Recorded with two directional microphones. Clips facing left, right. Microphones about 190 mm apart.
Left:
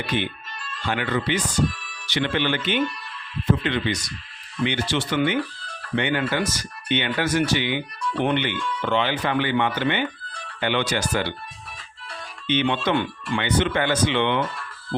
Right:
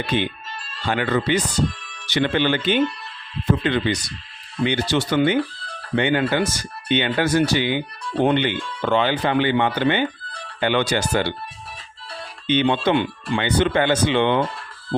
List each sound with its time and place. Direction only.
0.7 s speech: 35° right (ahead or behind)
10.9 s speech: 30° right (ahead or behind)
12.5 s speech: 35° right (ahead or behind)